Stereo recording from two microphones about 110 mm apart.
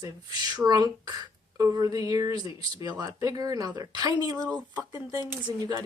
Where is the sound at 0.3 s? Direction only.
35° right (ahead or behind).